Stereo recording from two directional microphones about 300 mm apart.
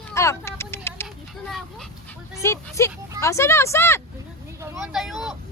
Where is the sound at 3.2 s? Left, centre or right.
Centre.